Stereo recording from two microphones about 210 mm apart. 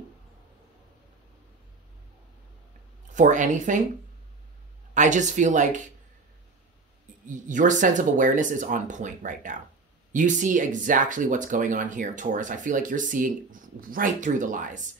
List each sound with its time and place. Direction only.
3.1 s speech: 35° right (ahead or behind)
4.9 s speech: 35° right (ahead or behind)
7.2 s speech: 40° right (ahead or behind)